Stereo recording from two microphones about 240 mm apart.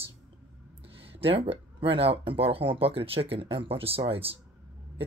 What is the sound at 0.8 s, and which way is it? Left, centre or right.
Speech, right.